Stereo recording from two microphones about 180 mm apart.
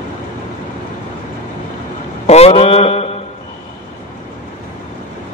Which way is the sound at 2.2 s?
35° left (ahead or behind).